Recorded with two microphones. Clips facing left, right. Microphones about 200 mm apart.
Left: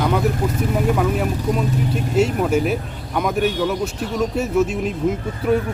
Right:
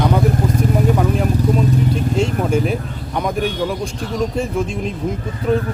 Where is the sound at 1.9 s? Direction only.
5° left (ahead or behind).